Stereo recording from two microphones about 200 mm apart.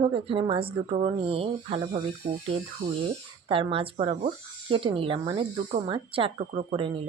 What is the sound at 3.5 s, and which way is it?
Speech, 25° right (ahead or behind).